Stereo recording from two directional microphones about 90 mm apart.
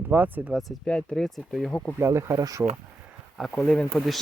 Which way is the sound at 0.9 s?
10° left (ahead or behind).